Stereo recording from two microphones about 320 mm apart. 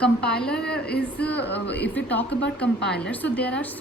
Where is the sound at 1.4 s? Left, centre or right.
Left.